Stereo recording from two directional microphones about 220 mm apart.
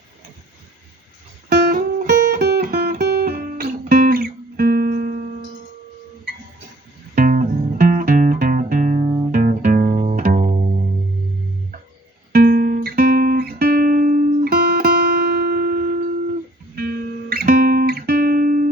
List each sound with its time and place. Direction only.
1.5 s music: 45° right (ahead or behind)
7.2 s music: 35° right (ahead or behind)
12.3 s music: 40° right (ahead or behind)